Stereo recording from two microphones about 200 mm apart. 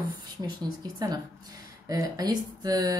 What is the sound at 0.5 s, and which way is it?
A woman's voice, 20° right (ahead or behind).